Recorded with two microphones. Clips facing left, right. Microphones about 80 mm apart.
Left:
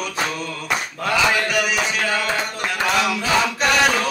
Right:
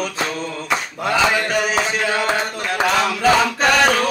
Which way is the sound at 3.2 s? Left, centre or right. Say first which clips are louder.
Right 4 dB; right.